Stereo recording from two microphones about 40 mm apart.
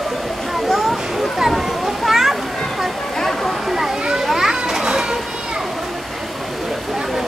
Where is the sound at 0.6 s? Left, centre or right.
Centre.